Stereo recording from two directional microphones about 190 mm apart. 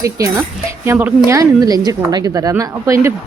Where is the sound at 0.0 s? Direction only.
15° right (ahead or behind).